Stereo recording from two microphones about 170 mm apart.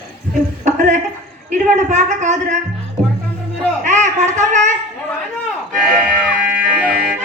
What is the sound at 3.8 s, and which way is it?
Speech, 45° right (ahead or behind).